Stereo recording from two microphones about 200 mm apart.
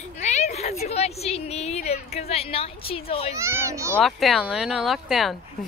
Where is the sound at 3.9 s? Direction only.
Centre (ahead or behind).